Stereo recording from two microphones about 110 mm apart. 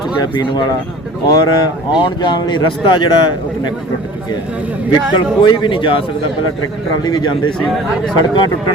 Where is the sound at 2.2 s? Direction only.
40° left (ahead or behind).